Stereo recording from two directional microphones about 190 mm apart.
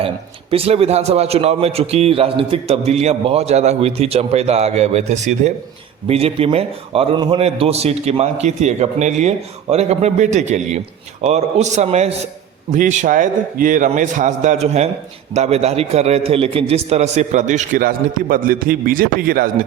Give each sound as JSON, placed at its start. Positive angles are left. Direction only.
{"t": 0.5, "sound": "a man's voice", "side_deg": -30}